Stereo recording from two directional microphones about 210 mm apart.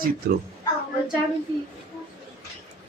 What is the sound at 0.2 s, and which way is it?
Speech, 50° right (ahead or behind).